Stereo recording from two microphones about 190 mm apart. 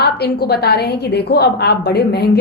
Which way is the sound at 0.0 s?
55° left (ahead or behind).